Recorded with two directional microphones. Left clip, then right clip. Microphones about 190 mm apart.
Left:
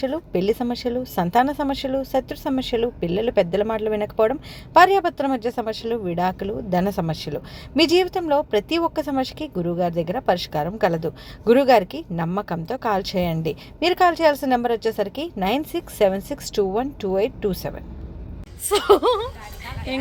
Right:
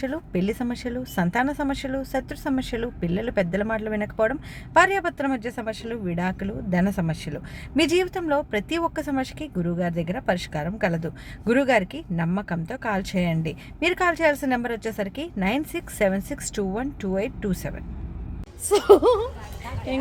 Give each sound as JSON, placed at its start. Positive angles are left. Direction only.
{"t": 0.0, "sound": "a woman's voice", "side_deg": 0}